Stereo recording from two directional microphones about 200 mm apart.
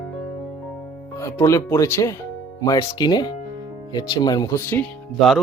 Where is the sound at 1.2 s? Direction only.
15° left (ahead or behind).